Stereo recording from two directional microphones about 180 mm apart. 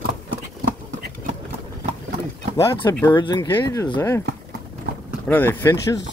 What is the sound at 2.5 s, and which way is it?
Speech, 15° left (ahead or behind).